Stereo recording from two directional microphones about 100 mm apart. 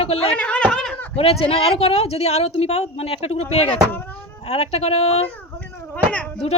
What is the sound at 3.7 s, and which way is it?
Speech, 20° left (ahead or behind).